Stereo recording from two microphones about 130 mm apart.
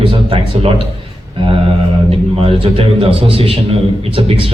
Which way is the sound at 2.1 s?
45° right (ahead or behind).